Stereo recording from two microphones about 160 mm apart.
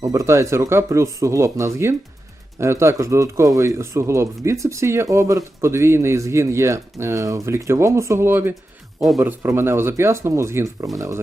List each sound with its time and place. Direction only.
0.0 s speech: 20° right (ahead or behind)